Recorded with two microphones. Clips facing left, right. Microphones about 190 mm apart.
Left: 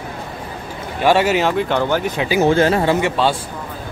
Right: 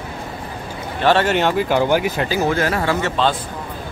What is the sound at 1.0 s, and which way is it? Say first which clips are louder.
Speech: left 1 dB; 10° left (ahead or behind).